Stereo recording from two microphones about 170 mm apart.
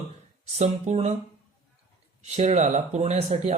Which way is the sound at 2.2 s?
40° right (ahead or behind).